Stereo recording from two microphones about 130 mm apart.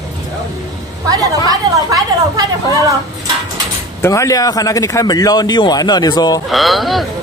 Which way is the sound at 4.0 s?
25° left (ahead or behind).